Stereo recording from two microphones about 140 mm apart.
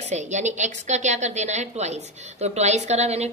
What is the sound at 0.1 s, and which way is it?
A woman's voice, 55° right (ahead or behind).